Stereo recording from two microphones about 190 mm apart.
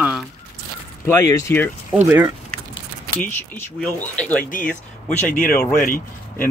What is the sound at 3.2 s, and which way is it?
Speech, 10° left (ahead or behind).